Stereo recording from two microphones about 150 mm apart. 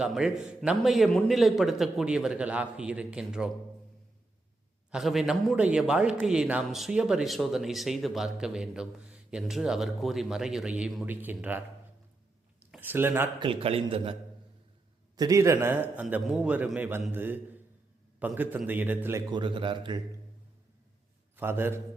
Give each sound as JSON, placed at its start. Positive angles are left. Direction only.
{"t": 0.0, "sound": "speech", "side_deg": -5}
{"t": 4.9, "sound": "speech", "side_deg": 0}
{"t": 12.7, "sound": "speech", "side_deg": -15}
{"t": 13.4, "sound": "a man's voice", "side_deg": -40}
{"t": 15.1, "sound": "a man's voice", "side_deg": -25}
{"t": 18.3, "sound": "a man's voice", "side_deg": -10}
{"t": 19.3, "sound": "a man's voice", "side_deg": -30}
{"t": 21.3, "sound": "a man's voice", "side_deg": -15}